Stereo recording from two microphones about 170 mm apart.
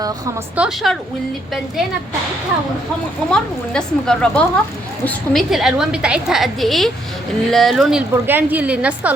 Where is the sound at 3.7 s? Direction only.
5° left (ahead or behind).